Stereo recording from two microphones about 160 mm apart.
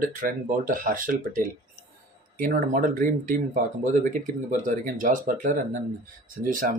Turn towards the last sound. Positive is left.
turn(degrees=-55)  # may be behind; listen again after turning